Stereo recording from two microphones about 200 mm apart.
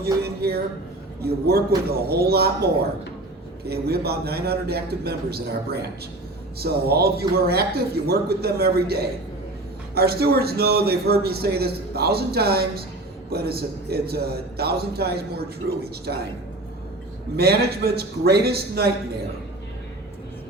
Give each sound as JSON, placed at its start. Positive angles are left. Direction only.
{"t": 0.0, "sound": "a man's voice", "side_deg": -55}
{"t": 17.3, "sound": "a man's voice", "side_deg": -50}